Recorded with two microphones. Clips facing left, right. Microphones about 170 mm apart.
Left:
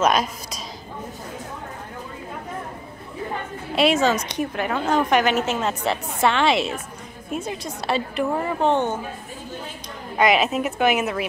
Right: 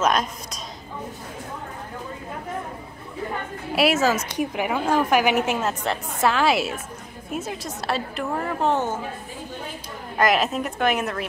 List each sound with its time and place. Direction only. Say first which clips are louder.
0.0 s a woman's voice: left 2 dB; 5° left (ahead or behind)
3.7 s a woman's voice: left 1 dB; 5° right (ahead or behind)
5.7 s a woman's voice: left 2 dB; centre (ahead or behind)
10.1 s a woman's voice: left 2 dB; centre (ahead or behind)